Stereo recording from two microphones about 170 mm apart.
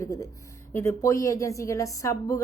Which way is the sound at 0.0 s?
20° left (ahead or behind).